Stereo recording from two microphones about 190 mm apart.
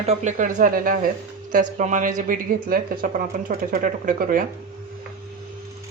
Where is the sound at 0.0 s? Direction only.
35° right (ahead or behind).